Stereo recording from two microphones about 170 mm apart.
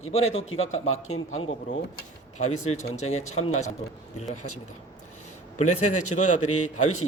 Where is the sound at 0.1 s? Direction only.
35° left (ahead or behind).